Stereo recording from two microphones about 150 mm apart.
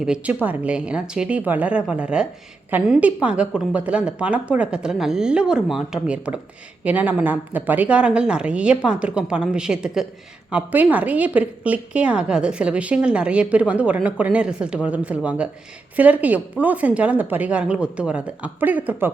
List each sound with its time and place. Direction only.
0.0 s a woman's voice: 5° right (ahead or behind)